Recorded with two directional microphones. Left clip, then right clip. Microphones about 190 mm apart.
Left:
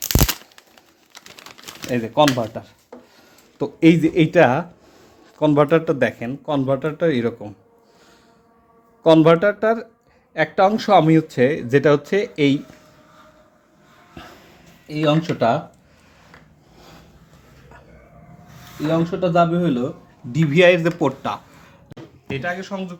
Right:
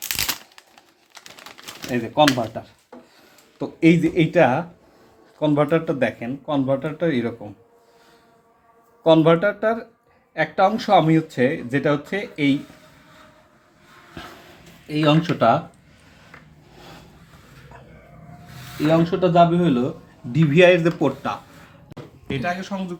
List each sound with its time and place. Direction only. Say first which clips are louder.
0.0 s a sound: left 3 dB; 15° left (ahead or behind)
1.9 s speech: left 1 dB; 45° left (ahead or behind)
9.0 s speech: left 2 dB; 45° left (ahead or behind)
15.4 s speech: right 3 dB; 20° left (ahead or behind)
18.9 s speech: right 2 dB; 5° right (ahead or behind)
20.3 s speech: even; 10° left (ahead or behind)
21.9 s a sound: even; centre (ahead or behind)
22.3 s speech: even; centre (ahead or behind)